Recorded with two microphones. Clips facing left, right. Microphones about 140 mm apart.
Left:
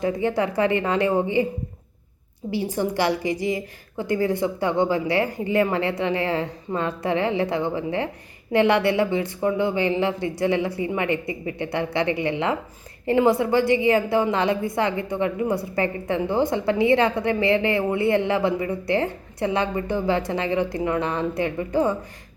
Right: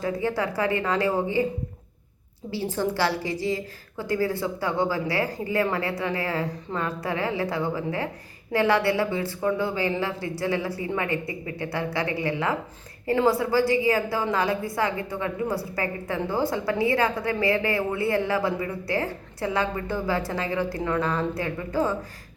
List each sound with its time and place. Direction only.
0.0 s a woman's voice: 20° left (ahead or behind)
2.5 s a woman's voice: 15° left (ahead or behind)